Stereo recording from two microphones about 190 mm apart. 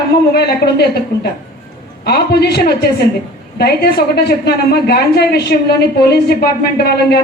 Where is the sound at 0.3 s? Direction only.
60° left (ahead or behind).